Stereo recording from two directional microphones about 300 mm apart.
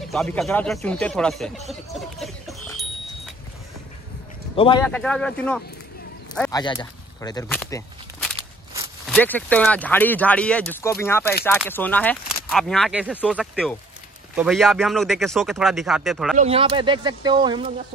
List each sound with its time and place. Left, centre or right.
0.1 s a man's voice: centre
4.6 s speech: centre
4.8 s a man's voice: centre
6.3 s a sound: centre
6.6 s speech: centre
8.7 s walk: centre
9.1 s a man's voice: centre
16.3 s speech: centre